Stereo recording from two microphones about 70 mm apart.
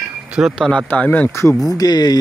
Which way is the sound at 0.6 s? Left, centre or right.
Centre.